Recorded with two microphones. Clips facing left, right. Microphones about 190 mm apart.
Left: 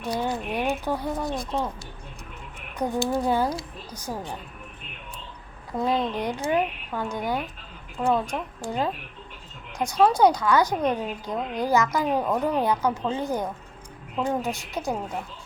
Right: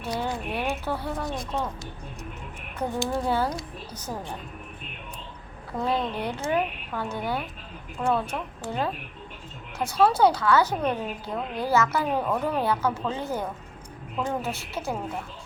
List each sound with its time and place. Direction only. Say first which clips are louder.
0.0 s a woman's voice: left 2 dB; 15° left (ahead or behind)
2.7 s a woman's voice: left 3 dB; 15° left (ahead or behind)
5.7 s a woman's voice: left 2 dB; 10° left (ahead or behind)